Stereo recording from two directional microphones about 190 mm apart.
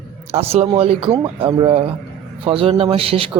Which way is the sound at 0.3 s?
35° right (ahead or behind).